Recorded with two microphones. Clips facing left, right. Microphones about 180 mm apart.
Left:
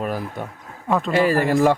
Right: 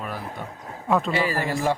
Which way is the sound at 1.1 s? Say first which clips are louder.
Left 6 dB; 45° left (ahead or behind).